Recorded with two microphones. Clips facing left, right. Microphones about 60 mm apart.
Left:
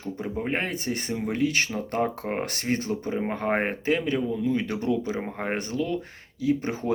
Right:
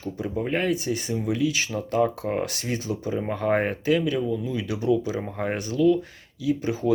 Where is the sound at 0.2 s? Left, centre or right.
Left.